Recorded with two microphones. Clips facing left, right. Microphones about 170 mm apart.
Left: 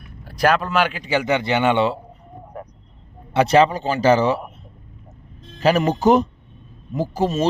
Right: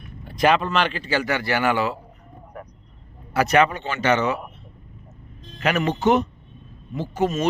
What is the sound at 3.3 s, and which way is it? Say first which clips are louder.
Speech: left 3 dB; 30° left (ahead or behind).